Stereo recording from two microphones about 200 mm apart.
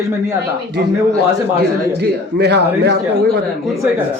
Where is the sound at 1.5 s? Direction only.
55° right (ahead or behind).